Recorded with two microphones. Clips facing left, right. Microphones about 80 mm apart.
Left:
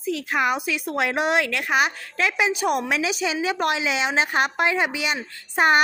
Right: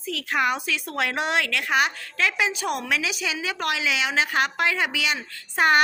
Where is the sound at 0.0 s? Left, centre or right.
Left.